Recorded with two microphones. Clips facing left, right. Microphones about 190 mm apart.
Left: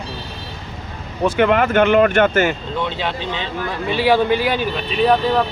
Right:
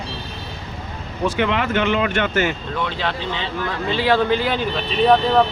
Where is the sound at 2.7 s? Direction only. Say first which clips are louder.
Left 1 dB; 20° left (ahead or behind).